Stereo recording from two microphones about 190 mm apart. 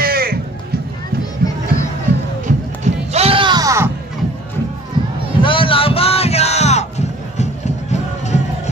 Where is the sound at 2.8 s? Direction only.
35° right (ahead or behind).